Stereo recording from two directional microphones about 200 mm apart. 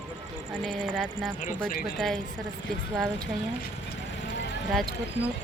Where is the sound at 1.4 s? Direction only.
40° left (ahead or behind).